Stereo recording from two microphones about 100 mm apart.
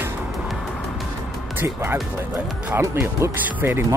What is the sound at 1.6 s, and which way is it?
Speech, 20° right (ahead or behind).